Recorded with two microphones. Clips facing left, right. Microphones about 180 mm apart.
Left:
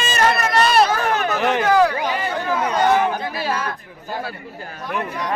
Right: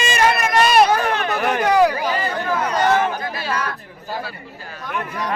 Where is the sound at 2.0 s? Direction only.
15° left (ahead or behind).